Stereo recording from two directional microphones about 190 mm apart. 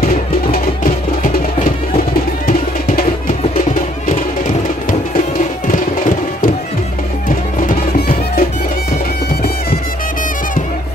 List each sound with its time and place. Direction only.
0.0 s music: 45° left (ahead or behind)
5.7 s music: 45° left (ahead or behind)